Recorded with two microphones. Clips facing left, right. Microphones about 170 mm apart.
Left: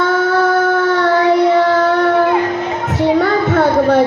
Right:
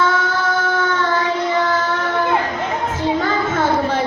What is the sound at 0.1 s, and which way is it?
Howl, 60° left (ahead or behind).